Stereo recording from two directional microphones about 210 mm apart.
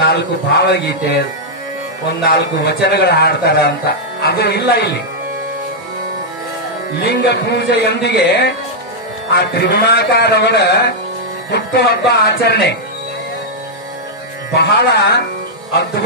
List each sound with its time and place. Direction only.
0.0 s speech: 55° left (ahead or behind)
2.2 s speech: 50° left (ahead or behind)
7.0 s speech: 55° left (ahead or behind)
14.5 s speech: 50° left (ahead or behind)